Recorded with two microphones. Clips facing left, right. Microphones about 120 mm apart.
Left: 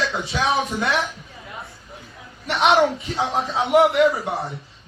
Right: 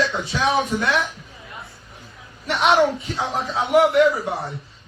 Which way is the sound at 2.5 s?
Centre (ahead or behind).